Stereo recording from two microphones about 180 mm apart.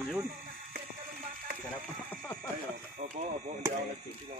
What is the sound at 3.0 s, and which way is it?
Speech, 40° right (ahead or behind).